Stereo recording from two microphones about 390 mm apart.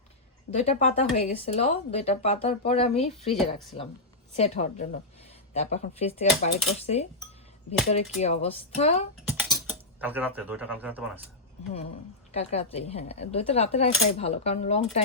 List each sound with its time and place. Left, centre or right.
0.5 s speech: centre
9.6 s speech: centre
12.3 s speech: centre